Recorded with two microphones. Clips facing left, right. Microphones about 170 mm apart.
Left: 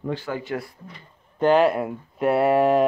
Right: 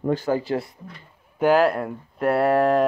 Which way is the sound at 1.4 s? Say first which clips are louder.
Even; 5° right (ahead or behind).